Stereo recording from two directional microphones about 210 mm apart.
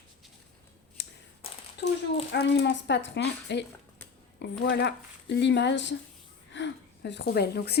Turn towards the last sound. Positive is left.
turn(degrees=50)  # may be behind; listen again after turning